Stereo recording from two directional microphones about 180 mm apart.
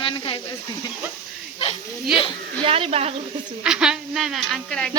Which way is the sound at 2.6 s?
30° right (ahead or behind).